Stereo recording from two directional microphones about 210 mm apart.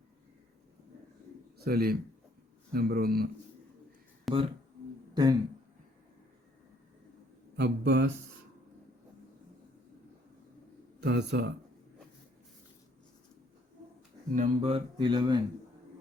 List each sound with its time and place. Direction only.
1.5 s a man's voice: 45° right (ahead or behind)
4.3 s speech: centre (ahead or behind)
5.1 s speech: 20° right (ahead or behind)
7.5 s speech: 55° right (ahead or behind)
11.0 s speech: 55° right (ahead or behind)
14.3 s a sound: 30° right (ahead or behind)